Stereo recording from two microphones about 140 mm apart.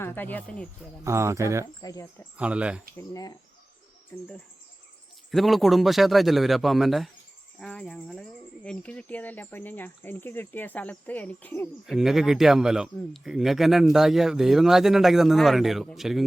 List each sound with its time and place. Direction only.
0.0 s speech: 15° left (ahead or behind)
1.0 s speech: 20° right (ahead or behind)
1.8 s speech: 25° left (ahead or behind)
2.4 s speech: 10° right (ahead or behind)
2.9 s speech: 25° left (ahead or behind)
5.3 s speech: centre (ahead or behind)
11.9 s speech: centre (ahead or behind)